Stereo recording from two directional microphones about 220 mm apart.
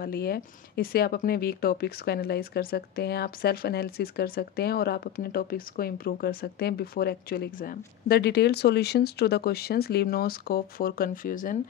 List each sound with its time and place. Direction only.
0.0 s speech: 45° left (ahead or behind)